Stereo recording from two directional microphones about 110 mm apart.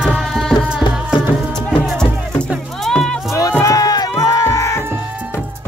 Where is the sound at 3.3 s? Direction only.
30° left (ahead or behind).